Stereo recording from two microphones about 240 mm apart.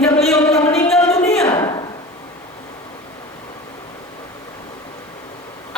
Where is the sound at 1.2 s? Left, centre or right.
Centre.